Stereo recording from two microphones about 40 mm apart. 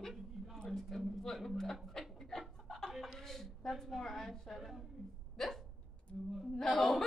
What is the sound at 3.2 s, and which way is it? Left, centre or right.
A woman's voice, centre.